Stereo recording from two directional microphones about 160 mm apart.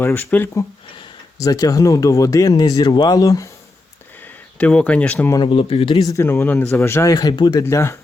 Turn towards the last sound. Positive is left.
turn(degrees=15)  # may be behind; listen again after turning